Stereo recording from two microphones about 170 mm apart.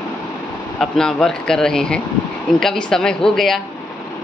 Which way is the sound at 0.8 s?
5° left (ahead or behind).